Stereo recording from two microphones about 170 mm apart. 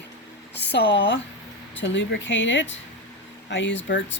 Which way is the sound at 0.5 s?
90° left.